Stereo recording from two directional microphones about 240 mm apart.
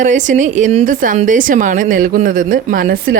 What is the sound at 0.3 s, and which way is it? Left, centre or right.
A woman's voice, right.